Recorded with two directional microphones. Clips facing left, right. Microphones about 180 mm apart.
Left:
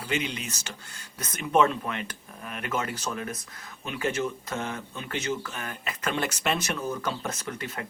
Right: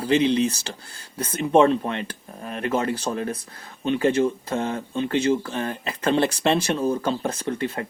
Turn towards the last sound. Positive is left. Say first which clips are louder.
# right 9 dB
turn(degrees=-30)  # may be behind; listen again after turning